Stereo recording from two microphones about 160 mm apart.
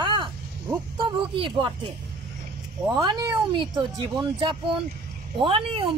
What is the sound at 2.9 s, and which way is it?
Speech, 25° right (ahead or behind).